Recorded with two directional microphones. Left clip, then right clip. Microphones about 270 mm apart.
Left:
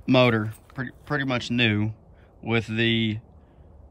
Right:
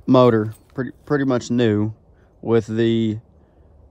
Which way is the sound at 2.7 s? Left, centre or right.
Centre.